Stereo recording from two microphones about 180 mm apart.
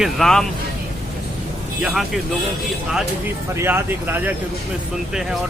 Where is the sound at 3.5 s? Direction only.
10° right (ahead or behind).